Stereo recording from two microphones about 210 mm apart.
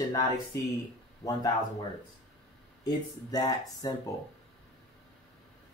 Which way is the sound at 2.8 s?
20° left (ahead or behind).